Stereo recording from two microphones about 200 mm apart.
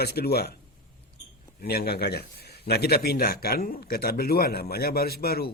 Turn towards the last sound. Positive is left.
turn(degrees=50)  # may be behind; listen again after turning